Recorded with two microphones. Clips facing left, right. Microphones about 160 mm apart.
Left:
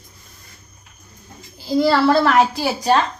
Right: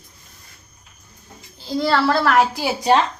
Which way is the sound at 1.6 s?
5° left (ahead or behind).